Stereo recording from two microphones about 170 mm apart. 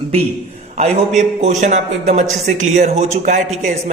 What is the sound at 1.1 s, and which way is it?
A man's voice, 45° right (ahead or behind).